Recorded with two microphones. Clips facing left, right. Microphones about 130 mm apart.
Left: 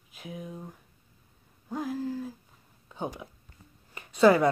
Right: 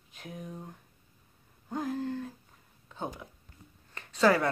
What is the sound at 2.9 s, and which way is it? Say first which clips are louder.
Speech: left 3 dB; 15° left (ahead or behind).